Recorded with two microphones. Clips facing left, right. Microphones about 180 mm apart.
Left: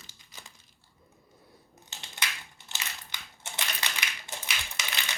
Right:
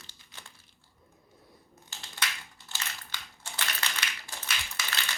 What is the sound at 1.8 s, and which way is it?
Crushing, 20° left (ahead or behind).